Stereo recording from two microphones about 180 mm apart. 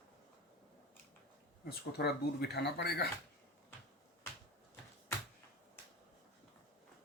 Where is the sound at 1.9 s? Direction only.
60° left (ahead or behind).